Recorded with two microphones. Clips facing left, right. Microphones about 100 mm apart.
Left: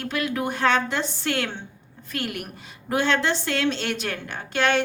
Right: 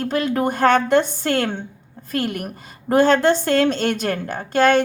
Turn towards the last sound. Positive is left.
turn(degrees=-45)  # may be behind; listen again after turning